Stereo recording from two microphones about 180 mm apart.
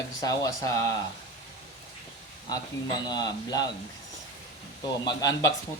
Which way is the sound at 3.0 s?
20° left (ahead or behind).